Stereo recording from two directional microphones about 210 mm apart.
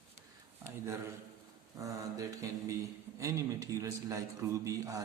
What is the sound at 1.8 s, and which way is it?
A man's voice, 15° right (ahead or behind).